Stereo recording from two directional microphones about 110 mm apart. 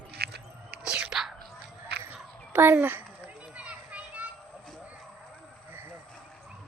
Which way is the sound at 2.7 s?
15° right (ahead or behind).